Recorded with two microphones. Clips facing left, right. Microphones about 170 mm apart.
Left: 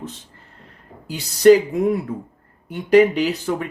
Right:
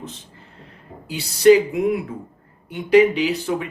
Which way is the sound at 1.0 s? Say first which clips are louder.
Left 1 dB; 45° left (ahead or behind).